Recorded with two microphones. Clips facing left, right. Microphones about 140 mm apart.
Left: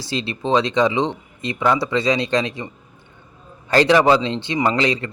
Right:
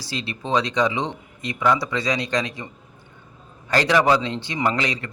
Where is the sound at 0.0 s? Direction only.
25° left (ahead or behind).